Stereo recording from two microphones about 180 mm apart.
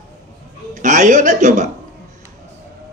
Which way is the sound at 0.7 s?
40° right (ahead or behind).